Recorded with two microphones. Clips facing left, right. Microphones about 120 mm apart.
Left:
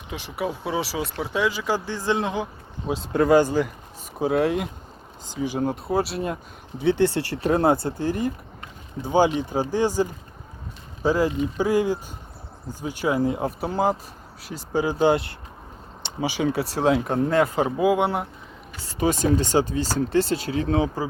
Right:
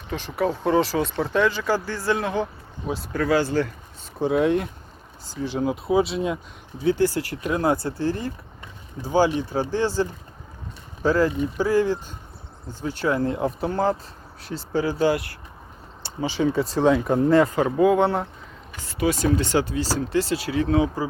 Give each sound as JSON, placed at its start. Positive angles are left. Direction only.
{"t": 0.1, "sound": "speech", "side_deg": 10}
{"t": 4.2, "sound": "speech", "side_deg": 0}
{"t": 5.6, "sound": "speech", "side_deg": 0}
{"t": 6.7, "sound": "speech", "side_deg": 25}
{"t": 16.0, "sound": "speech", "side_deg": 15}
{"t": 16.5, "sound": "speech", "side_deg": 75}
{"t": 16.8, "sound": "speech", "side_deg": 0}
{"t": 17.5, "sound": "speech", "side_deg": 15}
{"t": 19.0, "sound": "speech", "side_deg": 35}